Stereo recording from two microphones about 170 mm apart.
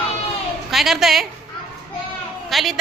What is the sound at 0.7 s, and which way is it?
Speech, centre (ahead or behind).